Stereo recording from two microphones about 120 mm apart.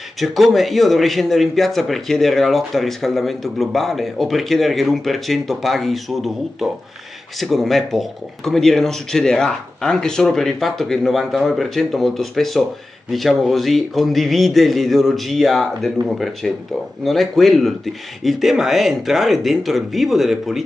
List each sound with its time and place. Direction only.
0.2 s speech: centre (ahead or behind)